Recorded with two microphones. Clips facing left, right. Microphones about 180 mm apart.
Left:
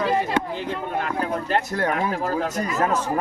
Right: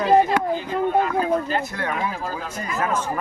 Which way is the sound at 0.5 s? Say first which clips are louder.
Right 6 dB; 70° left (ahead or behind).